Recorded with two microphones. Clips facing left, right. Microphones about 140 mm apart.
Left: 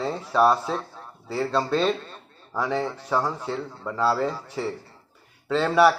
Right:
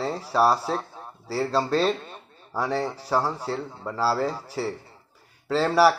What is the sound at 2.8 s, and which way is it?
Speech, 35° right (ahead or behind).